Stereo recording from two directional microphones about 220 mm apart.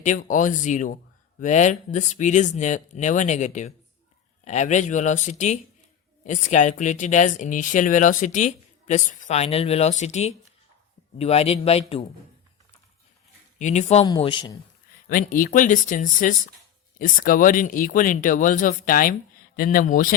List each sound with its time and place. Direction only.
0.0 s speech: 35° left (ahead or behind)
13.6 s speech: 30° left (ahead or behind)
15.1 s speech: 40° left (ahead or behind)